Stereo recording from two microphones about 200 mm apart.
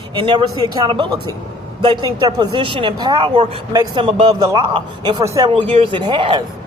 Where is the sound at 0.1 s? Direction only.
25° right (ahead or behind).